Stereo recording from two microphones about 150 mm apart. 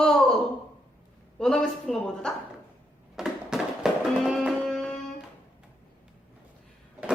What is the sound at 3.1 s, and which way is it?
Music, 5° right (ahead or behind).